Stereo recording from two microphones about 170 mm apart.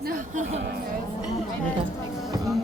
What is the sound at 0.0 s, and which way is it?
Speech, 55° right (ahead or behind).